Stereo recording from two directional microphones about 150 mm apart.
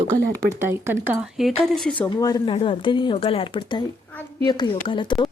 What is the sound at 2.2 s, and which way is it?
Speech, 25° left (ahead or behind).